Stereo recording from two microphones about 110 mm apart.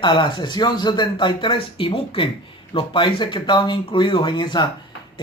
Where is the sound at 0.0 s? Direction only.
45° left (ahead or behind).